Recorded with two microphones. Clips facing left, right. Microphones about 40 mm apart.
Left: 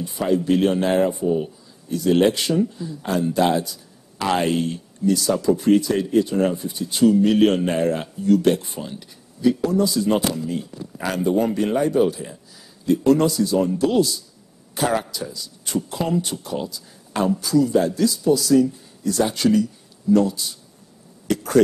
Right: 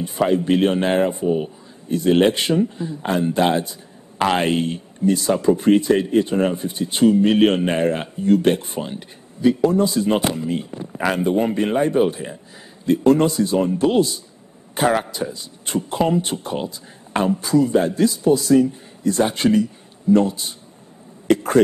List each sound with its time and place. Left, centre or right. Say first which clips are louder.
0.2 s speech: right 2 dB; right